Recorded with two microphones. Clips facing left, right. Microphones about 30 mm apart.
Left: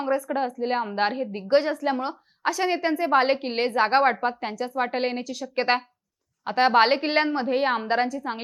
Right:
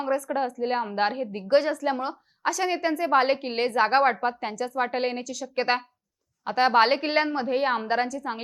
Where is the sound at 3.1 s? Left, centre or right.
Centre.